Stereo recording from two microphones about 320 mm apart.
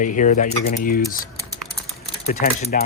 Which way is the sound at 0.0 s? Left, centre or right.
Left.